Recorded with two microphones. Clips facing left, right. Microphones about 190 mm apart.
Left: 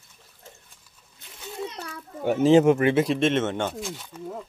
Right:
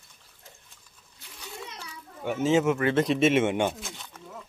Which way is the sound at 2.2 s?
35° left (ahead or behind).